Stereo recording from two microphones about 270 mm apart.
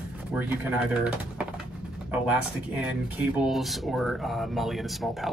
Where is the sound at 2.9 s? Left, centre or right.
Centre.